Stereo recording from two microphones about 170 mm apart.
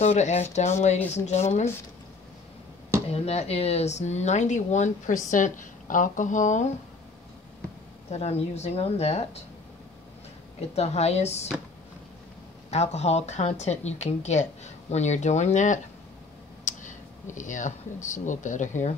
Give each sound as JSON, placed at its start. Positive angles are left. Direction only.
{"t": 0.0, "sound": "a woman's voice", "side_deg": 40}
{"t": 3.1, "sound": "speech", "side_deg": 40}
{"t": 8.1, "sound": "a woman's voice", "side_deg": 40}
{"t": 10.7, "sound": "a woman's voice", "side_deg": 40}
{"t": 12.7, "sound": "a woman's voice", "side_deg": 40}
{"t": 16.6, "sound": "clicking", "side_deg": 50}
{"t": 18.0, "sound": "speech", "side_deg": 45}